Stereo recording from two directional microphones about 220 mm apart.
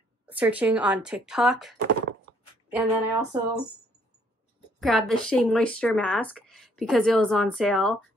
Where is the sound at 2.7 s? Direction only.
15° right (ahead or behind).